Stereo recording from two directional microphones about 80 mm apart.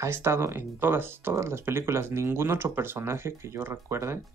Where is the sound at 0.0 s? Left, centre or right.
Right.